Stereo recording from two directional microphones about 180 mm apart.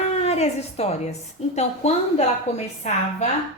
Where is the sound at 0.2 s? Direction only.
35° left (ahead or behind).